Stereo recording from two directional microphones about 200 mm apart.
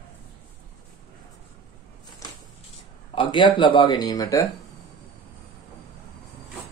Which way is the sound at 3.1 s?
25° left (ahead or behind).